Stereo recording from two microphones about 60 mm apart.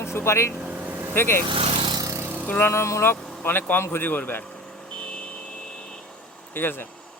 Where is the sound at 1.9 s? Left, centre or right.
Right.